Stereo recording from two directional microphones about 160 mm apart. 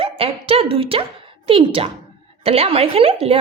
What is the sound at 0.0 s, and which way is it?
A woman's voice, 35° right (ahead or behind).